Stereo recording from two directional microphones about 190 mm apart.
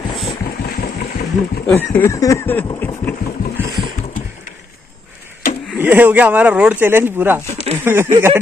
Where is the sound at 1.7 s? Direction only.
5° left (ahead or behind).